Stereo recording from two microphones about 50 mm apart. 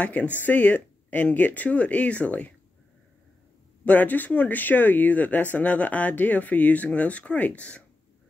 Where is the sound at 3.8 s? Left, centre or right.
Left.